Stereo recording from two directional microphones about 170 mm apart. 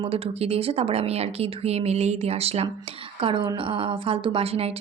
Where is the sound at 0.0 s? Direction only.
35° right (ahead or behind).